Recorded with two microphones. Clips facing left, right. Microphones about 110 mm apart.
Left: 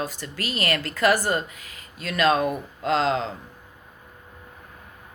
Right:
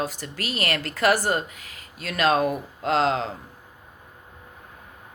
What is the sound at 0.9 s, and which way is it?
Speech, 45° right (ahead or behind).